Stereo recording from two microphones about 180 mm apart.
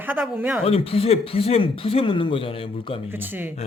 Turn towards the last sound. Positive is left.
turn(degrees=-10)  # may be behind; listen again after turning